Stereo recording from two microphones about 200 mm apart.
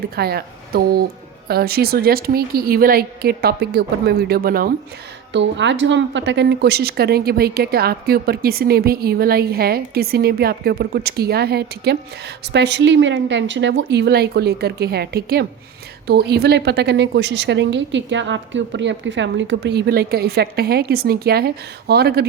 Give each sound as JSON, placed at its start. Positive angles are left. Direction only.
{"t": 0.2, "sound": "a woman's voice", "side_deg": -50}
{"t": 5.3, "sound": "a woman's voice", "side_deg": -65}